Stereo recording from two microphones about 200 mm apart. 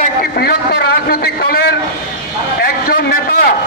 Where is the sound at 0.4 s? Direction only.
50° left (ahead or behind).